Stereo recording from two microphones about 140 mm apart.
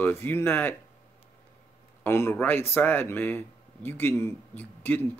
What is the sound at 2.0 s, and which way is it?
Speech, 15° left (ahead or behind).